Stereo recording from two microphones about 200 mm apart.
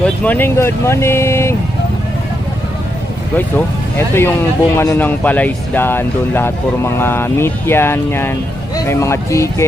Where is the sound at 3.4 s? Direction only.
10° left (ahead or behind).